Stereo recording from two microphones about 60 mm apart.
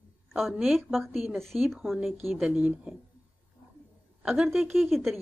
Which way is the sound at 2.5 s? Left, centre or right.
Right.